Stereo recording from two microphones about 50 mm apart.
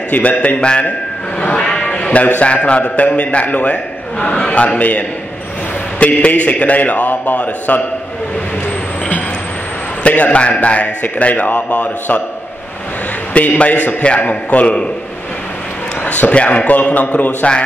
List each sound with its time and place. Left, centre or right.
0.1 s a man's voice: left
10.0 s speech: left
13.3 s speech: left
16.0 s a man's voice: left